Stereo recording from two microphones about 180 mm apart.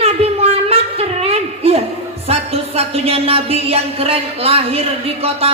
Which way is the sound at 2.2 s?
35° right (ahead or behind).